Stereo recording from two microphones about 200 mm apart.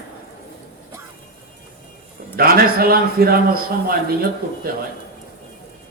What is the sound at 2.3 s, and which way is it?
A man's voice, 50° right (ahead or behind).